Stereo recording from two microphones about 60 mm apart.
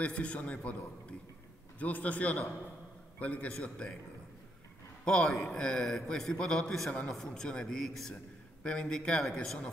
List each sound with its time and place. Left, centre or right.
0.0 s a man's voice: centre
5.0 s a man's voice: centre
8.6 s a man's voice: centre